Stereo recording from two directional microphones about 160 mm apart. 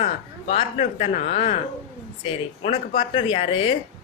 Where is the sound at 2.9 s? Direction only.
50° left (ahead or behind).